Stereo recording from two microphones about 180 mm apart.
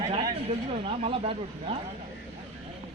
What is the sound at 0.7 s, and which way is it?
Speech, 30° right (ahead or behind).